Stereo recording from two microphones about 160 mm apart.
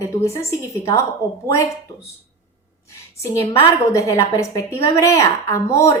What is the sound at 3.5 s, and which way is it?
A woman's voice, 20° left (ahead or behind).